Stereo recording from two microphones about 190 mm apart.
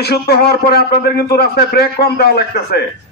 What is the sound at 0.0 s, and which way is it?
A man's voice, 55° left (ahead or behind).